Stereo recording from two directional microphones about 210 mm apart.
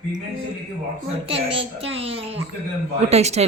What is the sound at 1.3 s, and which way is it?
A woman's voice, 25° right (ahead or behind).